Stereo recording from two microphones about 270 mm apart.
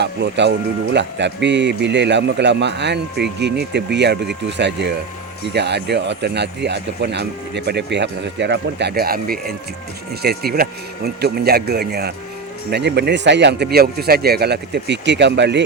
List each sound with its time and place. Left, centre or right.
0.0 s speech: right